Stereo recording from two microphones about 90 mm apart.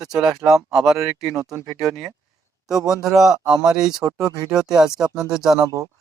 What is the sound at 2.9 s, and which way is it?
Speech, 5° right (ahead or behind).